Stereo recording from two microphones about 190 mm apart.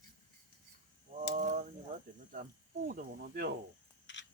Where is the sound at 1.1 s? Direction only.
40° right (ahead or behind).